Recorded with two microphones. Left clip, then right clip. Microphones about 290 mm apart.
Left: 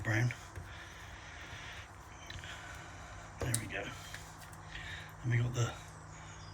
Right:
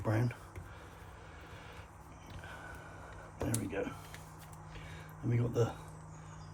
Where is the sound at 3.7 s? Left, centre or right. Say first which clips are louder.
Right 2 dB; centre.